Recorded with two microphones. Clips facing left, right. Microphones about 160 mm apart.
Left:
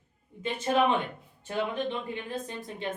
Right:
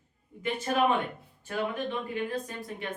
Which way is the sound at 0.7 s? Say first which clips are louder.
Left 3 dB; 20° left (ahead or behind).